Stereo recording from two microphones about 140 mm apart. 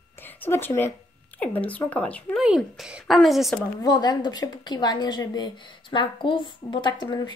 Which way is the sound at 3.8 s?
30° left (ahead or behind).